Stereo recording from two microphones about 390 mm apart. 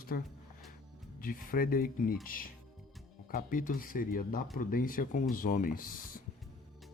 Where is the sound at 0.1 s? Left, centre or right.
Left.